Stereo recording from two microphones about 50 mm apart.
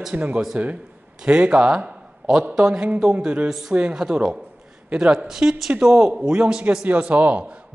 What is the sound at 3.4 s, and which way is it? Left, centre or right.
Speech, centre.